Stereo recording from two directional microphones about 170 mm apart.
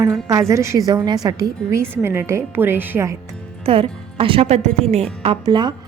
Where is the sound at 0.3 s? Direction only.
20° right (ahead or behind).